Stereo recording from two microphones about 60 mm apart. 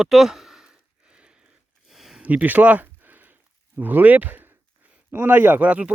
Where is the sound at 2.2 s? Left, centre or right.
Right.